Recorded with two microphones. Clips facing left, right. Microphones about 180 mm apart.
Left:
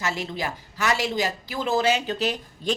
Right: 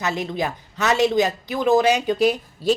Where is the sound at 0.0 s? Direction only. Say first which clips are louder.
Right 4 dB; 20° right (ahead or behind).